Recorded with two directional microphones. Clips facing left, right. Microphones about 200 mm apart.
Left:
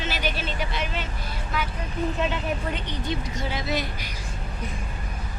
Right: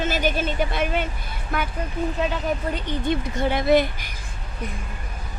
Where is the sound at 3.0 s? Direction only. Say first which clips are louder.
Right 8 dB; 55° right (ahead or behind).